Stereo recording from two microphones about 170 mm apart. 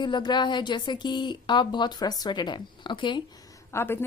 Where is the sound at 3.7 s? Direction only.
15° left (ahead or behind).